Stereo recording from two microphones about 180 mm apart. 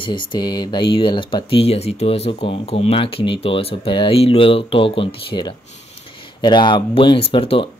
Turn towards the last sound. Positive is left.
turn(degrees=30)  # may be behind; listen again after turning